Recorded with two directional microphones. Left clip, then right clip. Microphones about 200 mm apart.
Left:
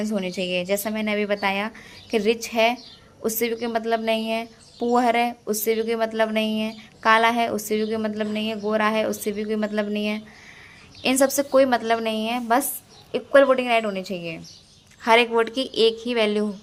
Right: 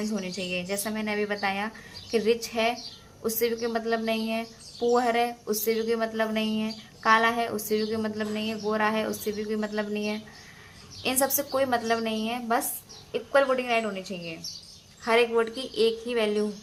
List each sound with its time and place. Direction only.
0.0 s a woman's voice: 40° left (ahead or behind)